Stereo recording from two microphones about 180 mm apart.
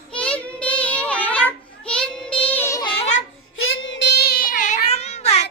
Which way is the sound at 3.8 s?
80° left.